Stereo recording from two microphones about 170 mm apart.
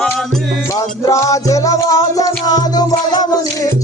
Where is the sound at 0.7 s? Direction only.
20° left (ahead or behind).